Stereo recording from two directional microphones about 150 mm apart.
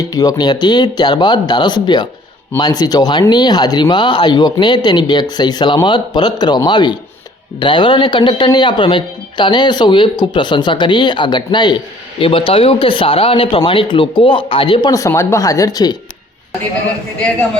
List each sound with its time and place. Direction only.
0.0 s speech: 25° left (ahead or behind)